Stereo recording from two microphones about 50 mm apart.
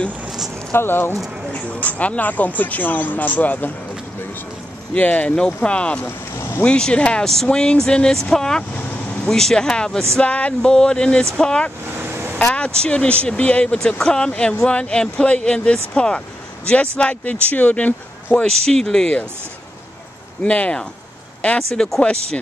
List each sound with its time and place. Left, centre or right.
0.7 s speech: left
1.5 s speech: left
4.9 s speech: left
6.0 s boat: left
6.6 s speech: left
10.2 s speech: left
12.0 s vehicle: right
12.4 s speech: centre
18.4 s speech: centre
20.4 s speech: left
21.5 s speech: centre